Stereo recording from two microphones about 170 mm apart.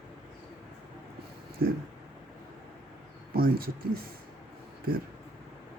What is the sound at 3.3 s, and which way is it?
Speech, 60° right (ahead or behind).